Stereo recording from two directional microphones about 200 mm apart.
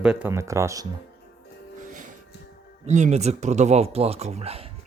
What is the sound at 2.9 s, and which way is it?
Speech, 35° right (ahead or behind).